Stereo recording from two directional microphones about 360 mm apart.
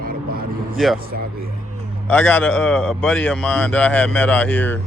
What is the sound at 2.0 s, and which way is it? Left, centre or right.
A man's voice, centre.